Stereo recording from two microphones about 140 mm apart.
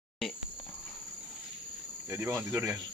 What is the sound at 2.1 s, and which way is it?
Speech, 15° right (ahead or behind).